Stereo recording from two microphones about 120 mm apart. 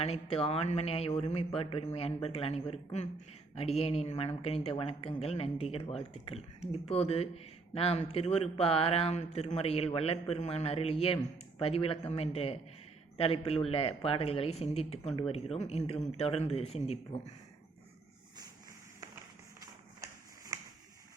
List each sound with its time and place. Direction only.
0.0 s speech: 55° left (ahead or behind)